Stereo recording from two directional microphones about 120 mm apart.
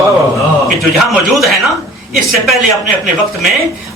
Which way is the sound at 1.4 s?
Centre (ahead or behind).